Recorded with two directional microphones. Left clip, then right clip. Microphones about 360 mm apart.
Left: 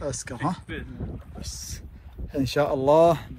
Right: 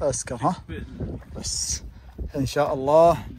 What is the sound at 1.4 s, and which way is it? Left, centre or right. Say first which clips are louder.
Speech: right 11 dB; centre.